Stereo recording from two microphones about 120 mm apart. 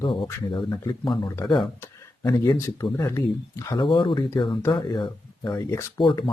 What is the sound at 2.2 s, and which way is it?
Speech, 25° left (ahead or behind).